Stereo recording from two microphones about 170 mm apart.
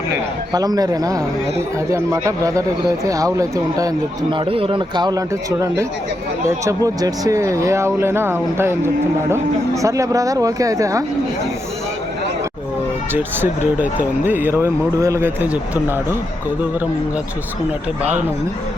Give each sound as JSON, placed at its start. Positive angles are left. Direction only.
{"t": 0.5, "sound": "speech", "side_deg": -20}
{"t": 13.1, "sound": "speech", "side_deg": -10}